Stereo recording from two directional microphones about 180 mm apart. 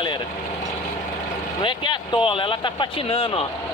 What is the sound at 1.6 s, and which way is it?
Speech, 30° left (ahead or behind).